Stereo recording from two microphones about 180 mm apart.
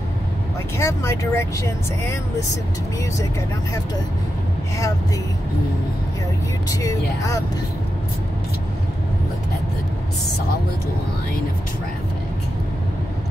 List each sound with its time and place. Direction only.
0.7 s speech: 15° left (ahead or behind)
6.7 s speech: 20° left (ahead or behind)